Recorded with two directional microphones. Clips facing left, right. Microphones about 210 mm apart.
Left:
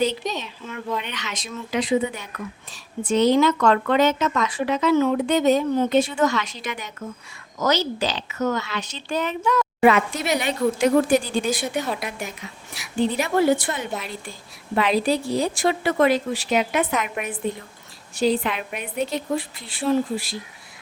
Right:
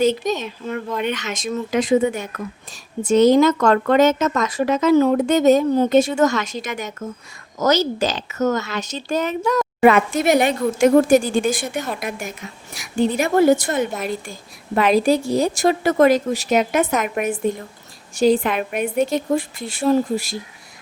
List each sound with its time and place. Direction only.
0.0 s speech: 45° right (ahead or behind)